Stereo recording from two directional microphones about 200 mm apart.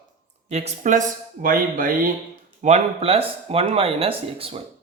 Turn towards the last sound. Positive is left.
turn(degrees=-30)  # may be behind; listen again after turning